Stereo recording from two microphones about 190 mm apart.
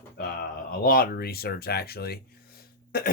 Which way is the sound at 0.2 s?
50° left (ahead or behind).